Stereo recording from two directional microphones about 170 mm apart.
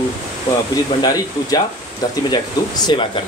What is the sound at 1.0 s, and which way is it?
Speech, 20° left (ahead or behind).